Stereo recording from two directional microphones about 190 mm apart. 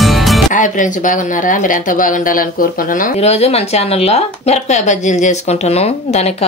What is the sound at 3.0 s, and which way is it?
Speech, 35° left (ahead or behind).